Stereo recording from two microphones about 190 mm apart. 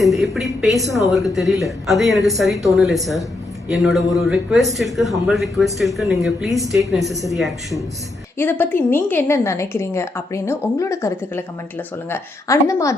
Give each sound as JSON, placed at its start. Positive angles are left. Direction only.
{"t": 0.0, "sound": "speech", "side_deg": 0}
{"t": 8.4, "sound": "a woman's voice", "side_deg": 10}